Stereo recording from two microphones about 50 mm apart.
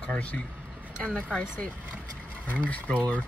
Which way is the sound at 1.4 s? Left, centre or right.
Left.